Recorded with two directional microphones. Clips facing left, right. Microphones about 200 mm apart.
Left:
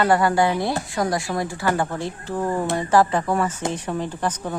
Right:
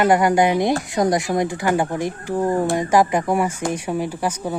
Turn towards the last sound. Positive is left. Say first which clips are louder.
# right 2 dB
turn(degrees=-10)  # may be behind; listen again after turning